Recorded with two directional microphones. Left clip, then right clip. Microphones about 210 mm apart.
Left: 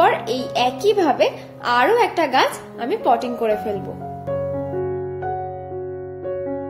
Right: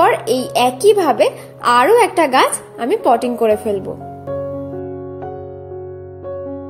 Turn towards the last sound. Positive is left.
turn(degrees=0)  # may be behind; listen again after turning